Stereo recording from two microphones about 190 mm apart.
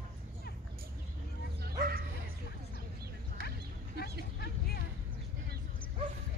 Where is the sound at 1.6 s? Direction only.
50° right (ahead or behind).